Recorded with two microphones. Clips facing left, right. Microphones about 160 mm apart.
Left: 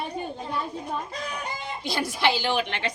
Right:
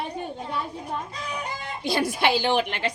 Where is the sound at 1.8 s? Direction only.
60° right (ahead or behind).